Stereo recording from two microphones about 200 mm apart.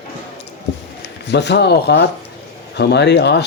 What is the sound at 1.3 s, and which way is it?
Speech, 55° left (ahead or behind).